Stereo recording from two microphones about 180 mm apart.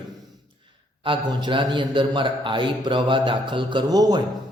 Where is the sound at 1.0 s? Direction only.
25° right (ahead or behind).